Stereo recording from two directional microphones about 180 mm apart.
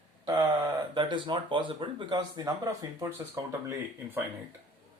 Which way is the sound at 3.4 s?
15° right (ahead or behind).